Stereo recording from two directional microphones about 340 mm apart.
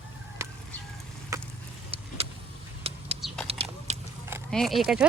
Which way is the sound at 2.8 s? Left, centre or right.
Centre.